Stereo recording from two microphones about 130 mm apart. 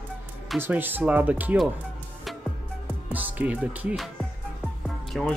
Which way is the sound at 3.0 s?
10° right (ahead or behind).